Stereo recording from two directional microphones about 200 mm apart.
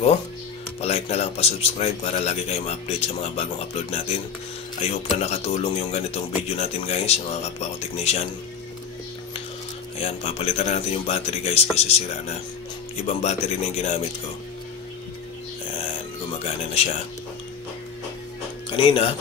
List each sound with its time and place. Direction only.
0.7 s speech: 30° left (ahead or behind)
9.9 s speech: 30° left (ahead or behind)
13.0 s speech: 35° left (ahead or behind)
16.4 s speech: 30° left (ahead or behind)
18.7 s speech: 25° left (ahead or behind)